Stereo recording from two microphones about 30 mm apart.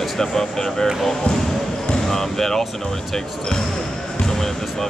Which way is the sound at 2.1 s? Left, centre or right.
Centre.